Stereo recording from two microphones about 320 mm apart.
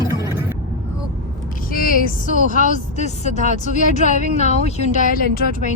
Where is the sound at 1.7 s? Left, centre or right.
Left.